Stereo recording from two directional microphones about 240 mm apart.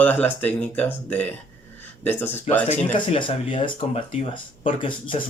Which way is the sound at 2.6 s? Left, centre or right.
Left.